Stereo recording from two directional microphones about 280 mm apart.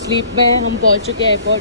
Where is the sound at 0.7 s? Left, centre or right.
Right.